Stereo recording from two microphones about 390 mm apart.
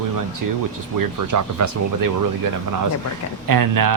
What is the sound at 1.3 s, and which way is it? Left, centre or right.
Speech, right.